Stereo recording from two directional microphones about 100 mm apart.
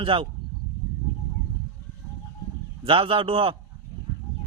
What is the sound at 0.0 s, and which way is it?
Speech, 60° right (ahead or behind).